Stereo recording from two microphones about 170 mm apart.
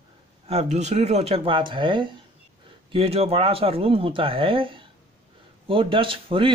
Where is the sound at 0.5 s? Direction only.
40° right (ahead or behind).